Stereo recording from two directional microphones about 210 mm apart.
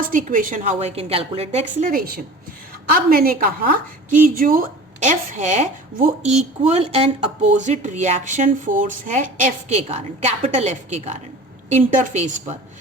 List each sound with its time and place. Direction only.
0.0 s a woman's voice: 40° right (ahead or behind)